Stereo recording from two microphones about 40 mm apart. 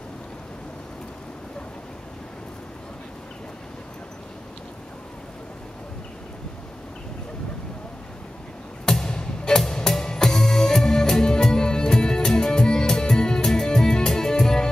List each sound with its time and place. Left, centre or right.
9.1 s music: centre